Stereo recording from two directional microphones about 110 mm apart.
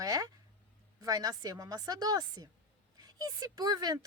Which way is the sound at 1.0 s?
35° right (ahead or behind).